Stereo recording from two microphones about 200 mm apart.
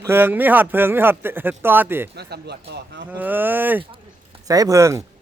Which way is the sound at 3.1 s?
10° right (ahead or behind).